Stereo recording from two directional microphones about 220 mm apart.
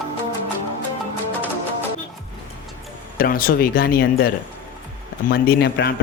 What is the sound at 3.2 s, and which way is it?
Speech, 40° left (ahead or behind).